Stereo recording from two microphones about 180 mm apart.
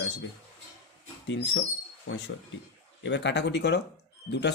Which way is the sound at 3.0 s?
75° left (ahead or behind).